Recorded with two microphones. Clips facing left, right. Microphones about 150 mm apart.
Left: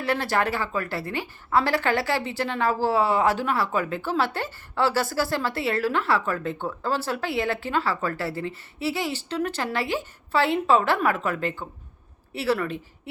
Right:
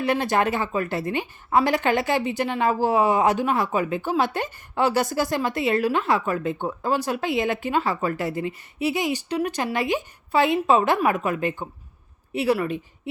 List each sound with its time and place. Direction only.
0.0 s a woman's voice: 20° right (ahead or behind)